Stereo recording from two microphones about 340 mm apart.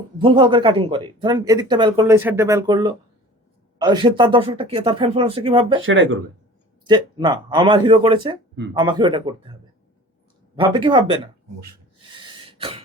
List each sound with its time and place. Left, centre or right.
0.2 s speech: centre
5.8 s speech: right
6.8 s speech: centre
12.1 s throat clearing: centre